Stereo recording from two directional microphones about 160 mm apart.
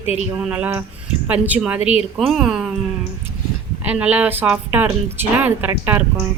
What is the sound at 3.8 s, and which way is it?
A woman's voice, 10° right (ahead or behind).